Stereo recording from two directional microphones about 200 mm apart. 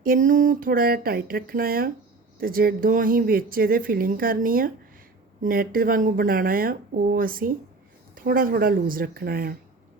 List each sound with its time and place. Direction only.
0.0 s speech: 45° right (ahead or behind)